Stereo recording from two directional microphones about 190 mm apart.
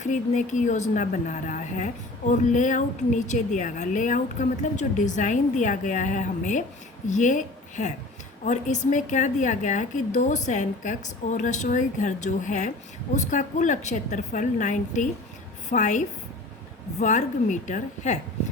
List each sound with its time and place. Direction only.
0.0 s a woman's voice: 40° left (ahead or behind)